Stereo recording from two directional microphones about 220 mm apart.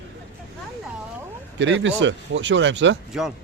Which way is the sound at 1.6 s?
55° right (ahead or behind).